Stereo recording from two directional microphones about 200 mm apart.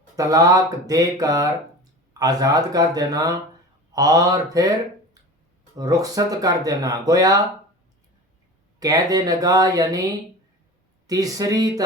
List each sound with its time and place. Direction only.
0.2 s speech: 20° right (ahead or behind)
5.7 s speech: 15° right (ahead or behind)
8.8 s speech: 20° right (ahead or behind)
11.0 s speech: 20° right (ahead or behind)